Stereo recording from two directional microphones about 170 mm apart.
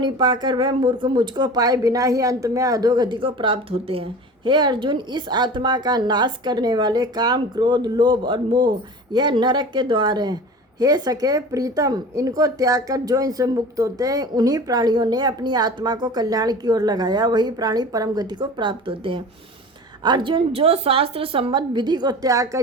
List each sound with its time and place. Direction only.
0.0 s a woman's voice: 25° right (ahead or behind)